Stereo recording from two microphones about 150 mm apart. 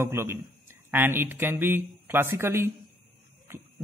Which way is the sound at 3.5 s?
15° right (ahead or behind).